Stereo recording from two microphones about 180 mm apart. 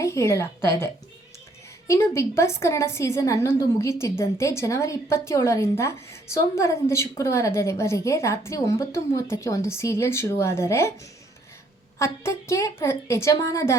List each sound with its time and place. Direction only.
0.0 s a woman's voice: 15° left (ahead or behind)
1.9 s a woman's voice: 15° left (ahead or behind)
11.9 s a woman's voice: 15° left (ahead or behind)